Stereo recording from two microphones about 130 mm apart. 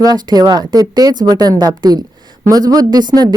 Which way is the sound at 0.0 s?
30° right (ahead or behind).